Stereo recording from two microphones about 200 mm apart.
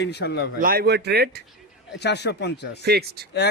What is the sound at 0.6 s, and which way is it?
Speech, 50° right (ahead or behind).